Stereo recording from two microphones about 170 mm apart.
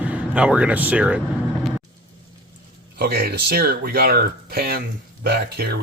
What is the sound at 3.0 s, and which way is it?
Speech, 65° right (ahead or behind).